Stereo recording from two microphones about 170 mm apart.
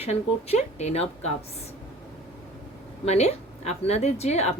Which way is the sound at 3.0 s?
40° left (ahead or behind).